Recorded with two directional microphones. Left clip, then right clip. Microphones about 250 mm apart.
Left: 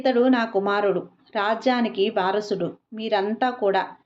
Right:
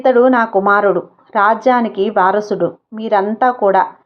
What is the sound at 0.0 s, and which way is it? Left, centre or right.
A woman's voice, centre.